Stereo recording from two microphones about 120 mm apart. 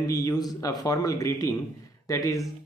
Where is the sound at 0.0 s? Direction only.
30° left (ahead or behind).